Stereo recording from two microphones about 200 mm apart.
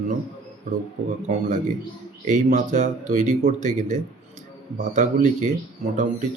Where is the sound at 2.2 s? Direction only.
35° right (ahead or behind).